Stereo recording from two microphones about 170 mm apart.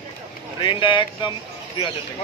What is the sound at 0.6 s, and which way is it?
Speech, 30° left (ahead or behind).